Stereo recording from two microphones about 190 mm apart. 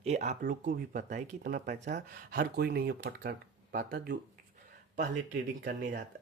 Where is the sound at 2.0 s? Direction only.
55° right (ahead or behind).